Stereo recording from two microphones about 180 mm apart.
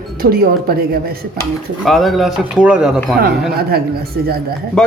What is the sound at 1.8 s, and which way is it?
A man's voice, centre (ahead or behind).